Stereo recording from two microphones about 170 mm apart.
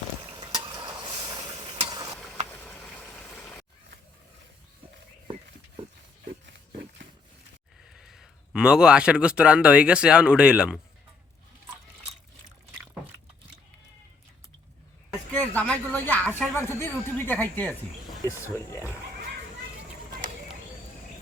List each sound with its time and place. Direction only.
0.3 s stir: 25° right (ahead or behind)
2.1 s a sound: centre (ahead or behind)
2.5 s vehicle: 10° left (ahead or behind)
7.9 s speech: centre (ahead or behind)
15.3 s speech: 10° left (ahead or behind)